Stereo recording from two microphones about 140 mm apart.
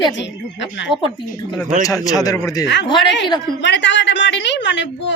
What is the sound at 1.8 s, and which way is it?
Speech, 25° left (ahead or behind).